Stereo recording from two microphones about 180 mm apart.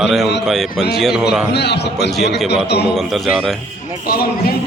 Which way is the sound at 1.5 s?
70° left (ahead or behind).